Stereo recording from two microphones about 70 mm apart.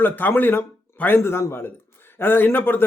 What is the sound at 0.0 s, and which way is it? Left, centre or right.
A man's voice, left.